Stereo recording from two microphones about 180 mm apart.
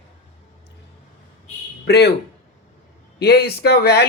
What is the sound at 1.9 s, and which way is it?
Speech, 65° left (ahead or behind).